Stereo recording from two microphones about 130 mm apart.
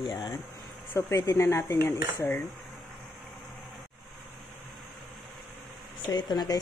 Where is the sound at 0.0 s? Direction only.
35° left (ahead or behind).